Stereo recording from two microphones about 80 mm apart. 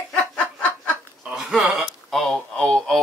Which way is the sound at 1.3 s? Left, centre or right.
Centre.